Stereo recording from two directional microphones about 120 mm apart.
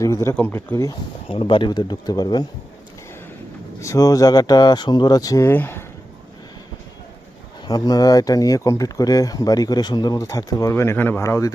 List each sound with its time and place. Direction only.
0.0 s speech: 25° left (ahead or behind)
1.3 s speech: 50° left (ahead or behind)
3.8 s speech: 25° left (ahead or behind)
5.5 s speech: 20° left (ahead or behind)
7.7 s speech: 35° left (ahead or behind)